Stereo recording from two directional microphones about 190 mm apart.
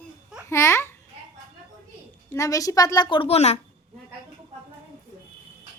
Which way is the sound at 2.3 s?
15° left (ahead or behind).